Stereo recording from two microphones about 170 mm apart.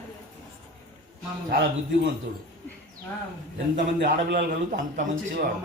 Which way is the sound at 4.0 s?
75° right (ahead or behind).